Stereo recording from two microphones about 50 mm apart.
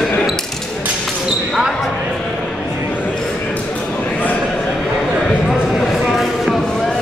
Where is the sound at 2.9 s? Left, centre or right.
Left.